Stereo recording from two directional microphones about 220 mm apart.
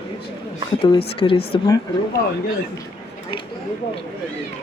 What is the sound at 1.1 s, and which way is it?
Speech, 25° left (ahead or behind).